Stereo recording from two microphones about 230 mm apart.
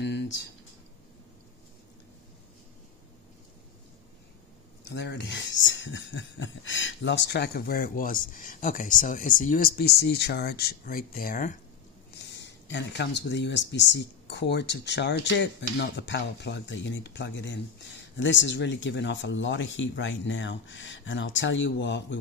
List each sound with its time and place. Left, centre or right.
0.0 s a sound: left
4.8 s speech: left
12.4 s speech: left